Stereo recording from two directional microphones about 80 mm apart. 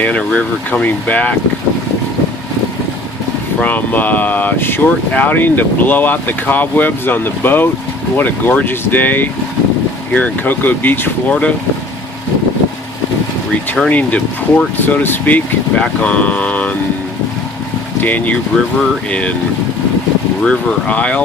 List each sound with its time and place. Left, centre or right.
0.0 s speech: centre
3.6 s speech: left
13.9 s speech: centre
18.0 s speech: left
20.4 s speech: centre